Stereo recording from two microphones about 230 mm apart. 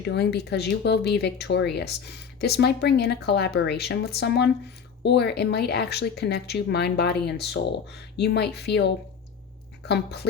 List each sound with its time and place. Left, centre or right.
0.0 s speech: left